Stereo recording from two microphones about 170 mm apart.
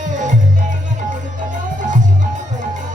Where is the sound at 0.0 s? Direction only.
45° right (ahead or behind).